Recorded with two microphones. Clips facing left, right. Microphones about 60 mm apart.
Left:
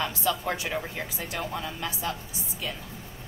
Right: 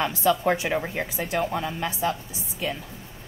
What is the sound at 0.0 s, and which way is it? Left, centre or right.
Speech, right.